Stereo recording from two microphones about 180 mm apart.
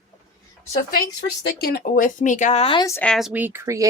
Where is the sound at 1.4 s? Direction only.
60° left (ahead or behind); by 2.8 s 35° left (ahead or behind).